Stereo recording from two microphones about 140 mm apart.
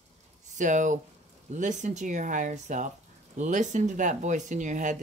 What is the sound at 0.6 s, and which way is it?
Speech, 65° right (ahead or behind).